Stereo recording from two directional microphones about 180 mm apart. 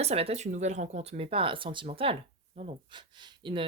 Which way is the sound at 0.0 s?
35° right (ahead or behind).